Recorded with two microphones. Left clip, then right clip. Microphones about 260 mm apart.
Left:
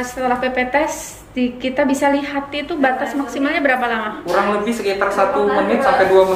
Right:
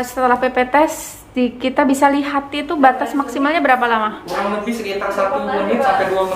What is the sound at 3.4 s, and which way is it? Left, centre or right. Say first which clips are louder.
Speech: right 2 dB; centre.